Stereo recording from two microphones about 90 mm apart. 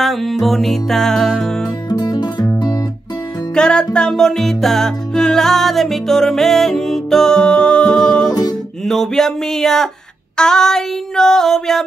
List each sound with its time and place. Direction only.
0.0 s music: centre (ahead or behind)
1.9 s music: 50° left (ahead or behind)
3.5 s music: 10° left (ahead or behind)
8.3 s music: 45° left (ahead or behind)
8.8 s music: 5° left (ahead or behind)